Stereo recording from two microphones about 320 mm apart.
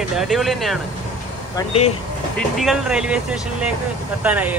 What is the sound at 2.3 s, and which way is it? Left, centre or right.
Speech, centre.